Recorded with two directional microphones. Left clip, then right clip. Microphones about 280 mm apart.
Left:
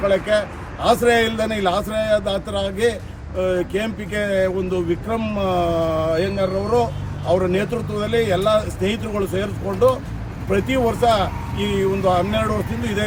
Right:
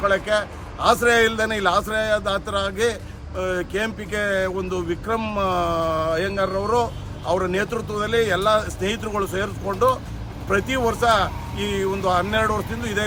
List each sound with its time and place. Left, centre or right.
0.0 s speech: centre
11.5 s speech: right
12.0 s speech: centre